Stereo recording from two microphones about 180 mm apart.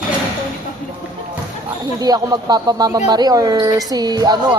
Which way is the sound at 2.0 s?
20° right (ahead or behind).